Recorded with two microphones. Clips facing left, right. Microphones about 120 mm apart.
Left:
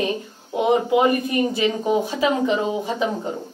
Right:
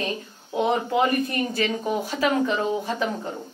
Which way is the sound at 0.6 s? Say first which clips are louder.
Left 4 dB; 15° left (ahead or behind).